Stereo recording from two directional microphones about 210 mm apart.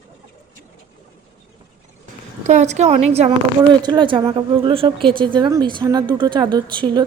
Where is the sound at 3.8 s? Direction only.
20° right (ahead or behind).